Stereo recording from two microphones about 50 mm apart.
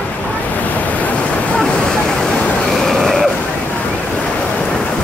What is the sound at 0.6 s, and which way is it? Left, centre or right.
Waterfall, left.